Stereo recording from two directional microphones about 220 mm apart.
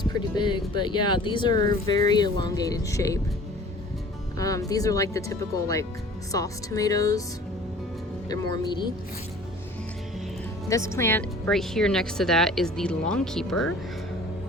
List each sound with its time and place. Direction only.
0.0 s speech: 20° left (ahead or behind)
4.4 s speech: 15° left (ahead or behind)
8.3 s speech: 15° left (ahead or behind)
10.9 s speech: 10° left (ahead or behind)